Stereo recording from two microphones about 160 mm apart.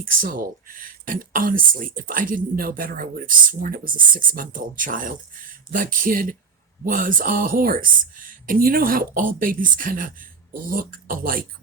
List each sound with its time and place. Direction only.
0.0 s speech: 60° right (ahead or behind)